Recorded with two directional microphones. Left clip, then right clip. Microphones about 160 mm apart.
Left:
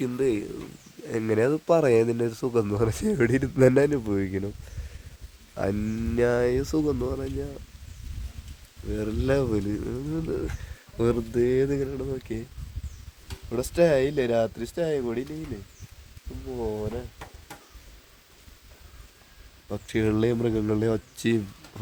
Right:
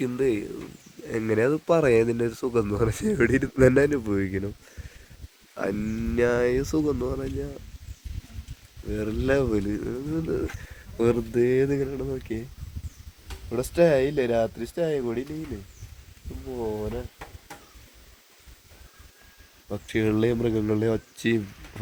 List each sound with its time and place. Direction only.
0.0 s speech: centre (ahead or behind)
5.5 s speech: 5° left (ahead or behind)
8.9 s speech: centre (ahead or behind)
13.5 s speech: 10° right (ahead or behind)
16.5 s speech: 15° right (ahead or behind)
19.6 s speech: 5° left (ahead or behind)